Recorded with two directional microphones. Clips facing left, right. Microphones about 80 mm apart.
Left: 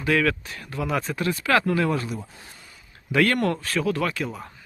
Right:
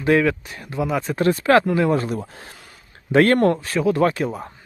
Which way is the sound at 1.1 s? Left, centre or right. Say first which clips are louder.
Right 8 dB; right.